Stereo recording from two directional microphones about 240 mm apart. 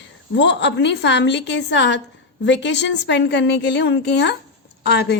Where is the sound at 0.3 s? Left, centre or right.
Left.